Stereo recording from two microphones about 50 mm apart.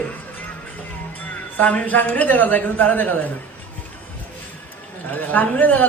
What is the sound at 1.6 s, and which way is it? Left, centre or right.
A woman's voice, left.